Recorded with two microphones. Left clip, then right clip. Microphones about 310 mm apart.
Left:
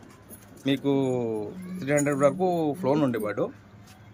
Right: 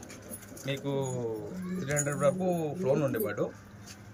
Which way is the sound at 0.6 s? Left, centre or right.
Left.